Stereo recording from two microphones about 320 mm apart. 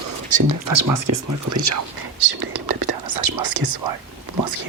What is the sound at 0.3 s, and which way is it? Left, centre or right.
Speech, right.